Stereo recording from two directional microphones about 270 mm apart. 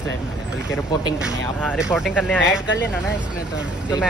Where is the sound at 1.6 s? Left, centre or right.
Centre.